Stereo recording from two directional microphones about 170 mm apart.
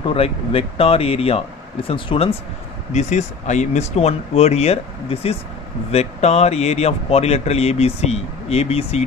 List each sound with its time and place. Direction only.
0.0 s a man's voice: 35° left (ahead or behind)
2.9 s a man's voice: 45° left (ahead or behind)